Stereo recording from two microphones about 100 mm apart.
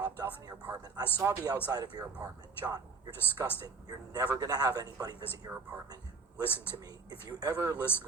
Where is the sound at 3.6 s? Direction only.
40° right (ahead or behind).